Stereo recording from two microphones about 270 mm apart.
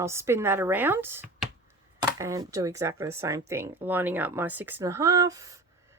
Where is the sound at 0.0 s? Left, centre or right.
Centre.